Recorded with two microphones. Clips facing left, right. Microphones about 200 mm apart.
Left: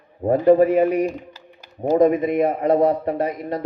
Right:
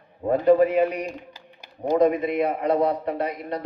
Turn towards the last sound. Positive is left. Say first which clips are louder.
# left 4 dB
turn(degrees=45)  # may be behind; listen again after turning